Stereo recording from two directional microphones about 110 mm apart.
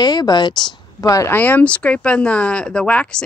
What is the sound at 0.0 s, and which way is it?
A woman's voice, 40° left (ahead or behind).